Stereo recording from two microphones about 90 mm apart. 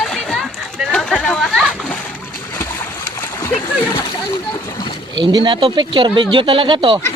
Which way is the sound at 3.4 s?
35° left (ahead or behind).